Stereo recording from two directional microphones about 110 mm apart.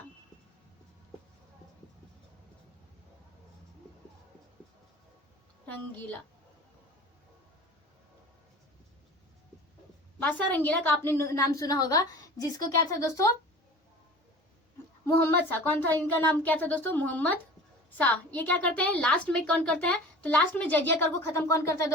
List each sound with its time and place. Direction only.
6.0 s a woman's voice: 15° left (ahead or behind)
10.2 s a woman's voice: 15° left (ahead or behind); by 13.2 s 30° left (ahead or behind)
15.0 s a woman's voice: 20° left (ahead or behind)